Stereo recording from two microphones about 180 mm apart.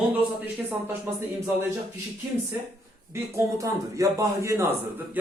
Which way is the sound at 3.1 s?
15° right (ahead or behind).